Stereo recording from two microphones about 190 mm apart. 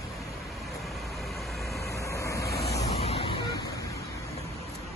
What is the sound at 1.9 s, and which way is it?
Vehicle, 15° left (ahead or behind).